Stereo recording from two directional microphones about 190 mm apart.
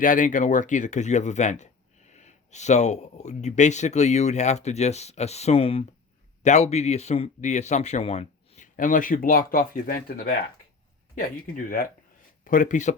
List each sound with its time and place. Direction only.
0.0 s speech: 45° left (ahead or behind)